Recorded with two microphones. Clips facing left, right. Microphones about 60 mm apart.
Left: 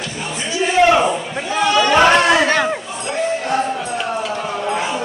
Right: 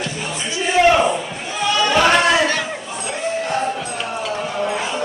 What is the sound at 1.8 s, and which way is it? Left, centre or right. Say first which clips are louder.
Chatter: left 2 dB; left.